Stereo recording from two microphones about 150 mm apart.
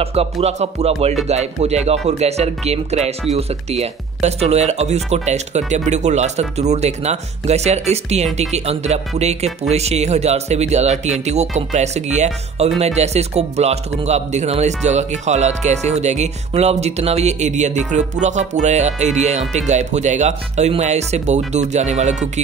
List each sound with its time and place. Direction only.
0.0 s speech: 40° right (ahead or behind)